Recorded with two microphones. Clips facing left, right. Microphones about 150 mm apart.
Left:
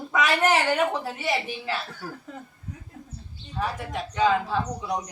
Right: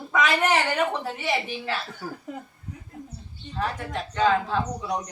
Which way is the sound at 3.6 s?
5° left (ahead or behind).